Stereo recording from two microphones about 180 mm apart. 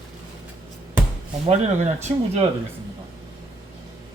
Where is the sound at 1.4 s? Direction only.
40° right (ahead or behind).